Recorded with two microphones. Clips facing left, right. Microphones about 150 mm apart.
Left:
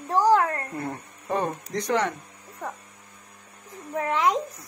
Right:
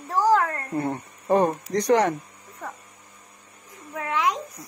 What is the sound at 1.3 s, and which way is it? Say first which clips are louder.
Speech: right 7 dB; 35° right (ahead or behind).